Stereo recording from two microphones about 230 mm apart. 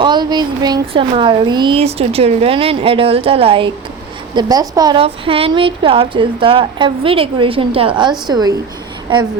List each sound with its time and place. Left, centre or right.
0.0 s a woman's voice: centre